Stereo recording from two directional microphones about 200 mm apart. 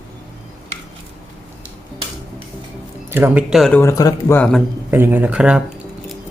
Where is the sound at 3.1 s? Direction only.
10° right (ahead or behind); by 4.6 s 5° left (ahead or behind).